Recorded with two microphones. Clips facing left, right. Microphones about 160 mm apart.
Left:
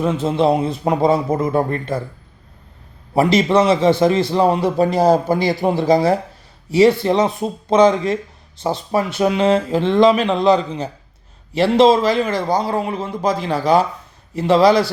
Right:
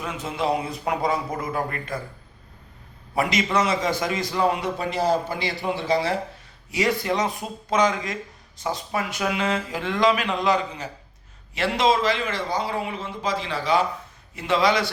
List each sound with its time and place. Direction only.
0.0 s speech: 30° left (ahead or behind)
3.2 s a man's voice: 30° left (ahead or behind)
6.7 s a man's voice: 30° left (ahead or behind)